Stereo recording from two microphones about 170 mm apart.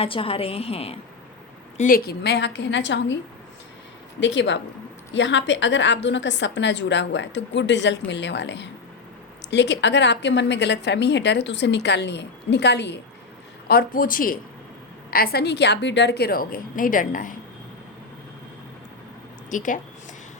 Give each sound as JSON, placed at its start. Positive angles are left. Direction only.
{"t": 0.0, "sound": "a woman's voice", "side_deg": 35}
{"t": 1.8, "sound": "a woman's voice", "side_deg": 60}
{"t": 4.2, "sound": "a woman's voice", "side_deg": 90}
{"t": 13.7, "sound": "a woman's voice", "side_deg": 60}
{"t": 19.5, "sound": "speech", "side_deg": 50}